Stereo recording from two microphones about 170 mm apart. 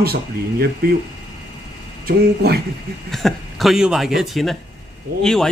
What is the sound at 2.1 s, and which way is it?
Speech, 65° right (ahead or behind).